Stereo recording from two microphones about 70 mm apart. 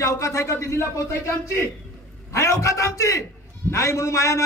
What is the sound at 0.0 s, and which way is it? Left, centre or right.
A man's voice, left.